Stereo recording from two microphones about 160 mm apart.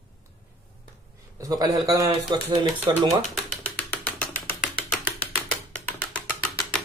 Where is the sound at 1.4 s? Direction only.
20° right (ahead or behind).